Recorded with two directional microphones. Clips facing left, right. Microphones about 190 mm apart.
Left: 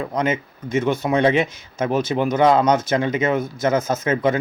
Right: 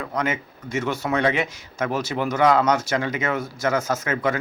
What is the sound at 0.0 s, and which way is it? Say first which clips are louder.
Speech: left 4 dB; 20° left (ahead or behind).